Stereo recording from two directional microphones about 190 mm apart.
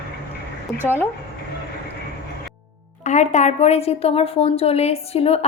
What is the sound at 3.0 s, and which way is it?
A woman's voice, 40° left (ahead or behind).